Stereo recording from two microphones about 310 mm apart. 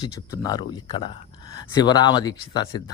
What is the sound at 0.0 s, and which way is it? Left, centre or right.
Speech, centre.